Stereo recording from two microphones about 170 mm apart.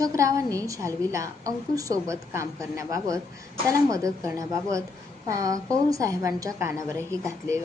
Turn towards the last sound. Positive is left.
turn(degrees=-15)  # may be behind; listen again after turning